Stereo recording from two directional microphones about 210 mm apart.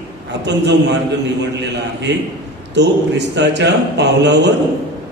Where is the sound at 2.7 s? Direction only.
55° right (ahead or behind).